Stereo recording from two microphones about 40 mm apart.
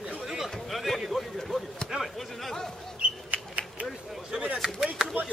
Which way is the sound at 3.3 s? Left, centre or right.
Right.